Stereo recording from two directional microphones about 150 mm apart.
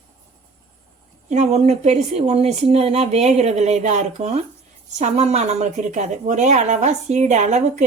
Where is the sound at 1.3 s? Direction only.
50° right (ahead or behind).